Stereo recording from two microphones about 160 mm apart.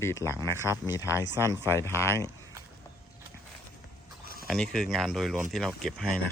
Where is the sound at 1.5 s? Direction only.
15° left (ahead or behind).